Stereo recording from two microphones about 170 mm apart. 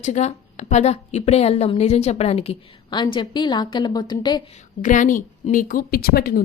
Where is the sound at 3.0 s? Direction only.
25° left (ahead or behind).